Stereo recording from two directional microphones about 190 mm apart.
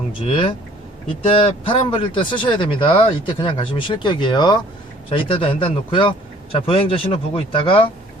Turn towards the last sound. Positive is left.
turn(degrees=30)  # may be behind; listen again after turning